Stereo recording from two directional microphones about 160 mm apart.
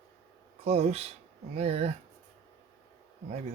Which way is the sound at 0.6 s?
40° right (ahead or behind).